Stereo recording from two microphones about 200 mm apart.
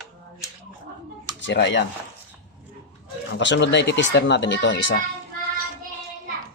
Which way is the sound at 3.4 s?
60° left (ahead or behind).